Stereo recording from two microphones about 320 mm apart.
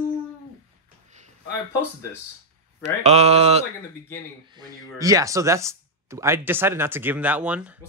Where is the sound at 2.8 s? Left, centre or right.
Centre.